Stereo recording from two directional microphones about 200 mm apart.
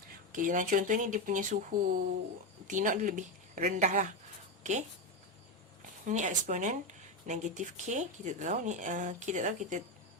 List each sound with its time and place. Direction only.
0.3 s speech: 40° right (ahead or behind)
6.1 s speech: 40° right (ahead or behind)